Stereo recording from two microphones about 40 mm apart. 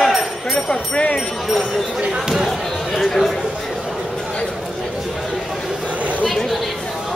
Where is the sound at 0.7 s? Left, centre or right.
Left.